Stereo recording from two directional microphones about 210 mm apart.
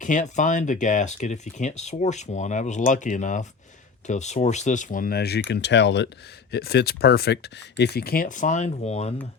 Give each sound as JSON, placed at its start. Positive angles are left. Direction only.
{"t": 0.0, "sound": "speech", "side_deg": 35}